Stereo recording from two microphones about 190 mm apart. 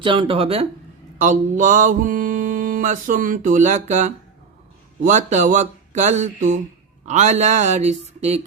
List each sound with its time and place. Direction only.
0.0 s speech: 25° right (ahead or behind)
1.2 s mantra: 40° right (ahead or behind)
5.0 s speech: 40° right (ahead or behind)